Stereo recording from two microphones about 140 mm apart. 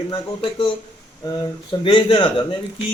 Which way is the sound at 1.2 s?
30° left (ahead or behind).